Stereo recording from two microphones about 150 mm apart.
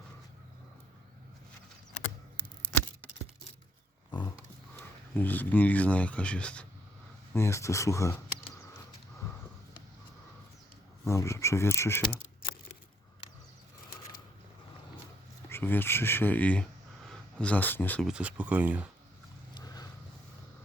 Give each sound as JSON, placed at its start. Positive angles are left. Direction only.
{"t": 4.1, "sound": "roaring cats", "side_deg": 30}
{"t": 4.8, "sound": "speech", "side_deg": 10}
{"t": 7.3, "sound": "speech", "side_deg": 20}
{"t": 11.0, "sound": "speech", "side_deg": 20}
{"t": 15.4, "sound": "speech", "side_deg": 15}
{"t": 18.0, "sound": "speech", "side_deg": -5}
{"t": 19.5, "sound": "a sound", "side_deg": 25}